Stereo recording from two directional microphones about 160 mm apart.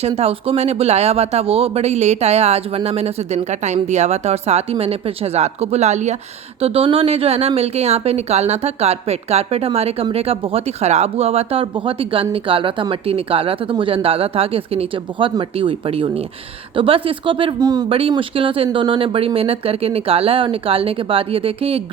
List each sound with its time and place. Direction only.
0.2 s speech: 40° right (ahead or behind)
17.8 s speech: 35° right (ahead or behind)